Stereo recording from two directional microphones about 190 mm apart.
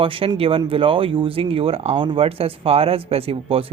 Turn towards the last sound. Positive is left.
turn(degrees=-30)  # may be behind; listen again after turning